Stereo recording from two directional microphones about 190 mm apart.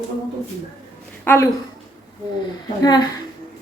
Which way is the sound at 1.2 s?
10° left (ahead or behind).